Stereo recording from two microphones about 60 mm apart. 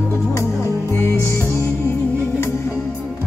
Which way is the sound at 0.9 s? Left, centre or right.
Left.